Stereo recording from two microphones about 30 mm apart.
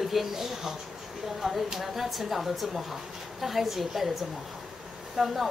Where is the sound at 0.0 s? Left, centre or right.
Centre.